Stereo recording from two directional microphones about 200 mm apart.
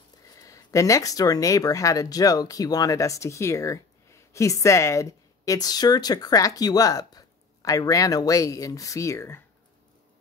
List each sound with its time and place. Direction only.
0.4 s speech: 15° left (ahead or behind)